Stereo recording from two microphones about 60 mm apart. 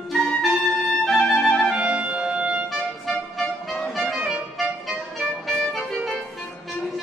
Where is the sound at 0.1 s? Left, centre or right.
Centre.